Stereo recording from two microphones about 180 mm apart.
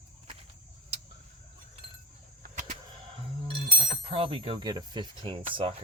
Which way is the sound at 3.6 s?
30° right (ahead or behind).